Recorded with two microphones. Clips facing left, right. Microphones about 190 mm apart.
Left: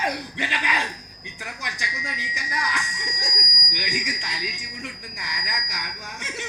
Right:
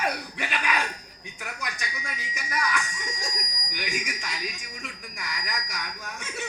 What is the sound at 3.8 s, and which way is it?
Speech, 15° left (ahead or behind).